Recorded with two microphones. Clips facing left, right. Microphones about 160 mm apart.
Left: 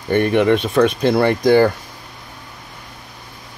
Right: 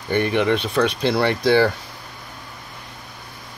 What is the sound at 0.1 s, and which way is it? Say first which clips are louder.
Speech: left 5 dB; 50° left (ahead or behind).